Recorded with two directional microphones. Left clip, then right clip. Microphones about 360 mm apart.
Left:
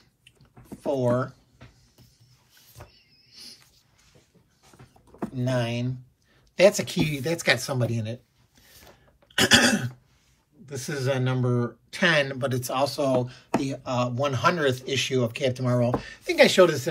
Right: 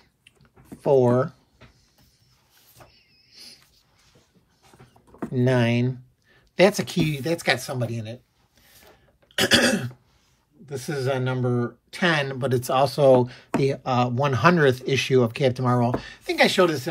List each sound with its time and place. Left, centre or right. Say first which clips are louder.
0.7 s speech: right 6 dB; centre
2.9 s a sound: even; centre
5.2 s speech: right 6 dB; centre
9.3 s speech: even; centre